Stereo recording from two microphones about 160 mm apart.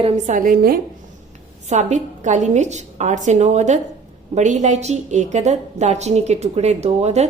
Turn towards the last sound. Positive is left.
turn(degrees=-45)  # may be behind; listen again after turning